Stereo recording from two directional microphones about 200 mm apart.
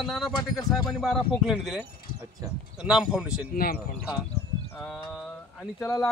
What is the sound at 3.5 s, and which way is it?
Speech, 45° left (ahead or behind).